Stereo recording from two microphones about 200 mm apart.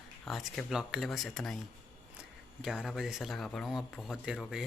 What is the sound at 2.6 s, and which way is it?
Speech, 5° right (ahead or behind).